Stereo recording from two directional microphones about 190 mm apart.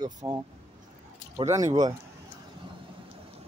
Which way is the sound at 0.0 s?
20° right (ahead or behind).